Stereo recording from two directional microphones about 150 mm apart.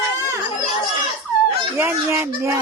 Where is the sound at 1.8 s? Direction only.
15° right (ahead or behind).